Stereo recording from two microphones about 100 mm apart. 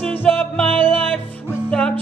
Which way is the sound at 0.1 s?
15° left (ahead or behind).